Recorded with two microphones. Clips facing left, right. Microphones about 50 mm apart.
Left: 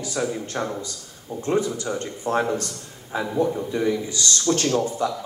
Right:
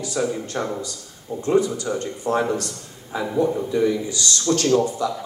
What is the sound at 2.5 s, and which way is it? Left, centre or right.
Speech, right.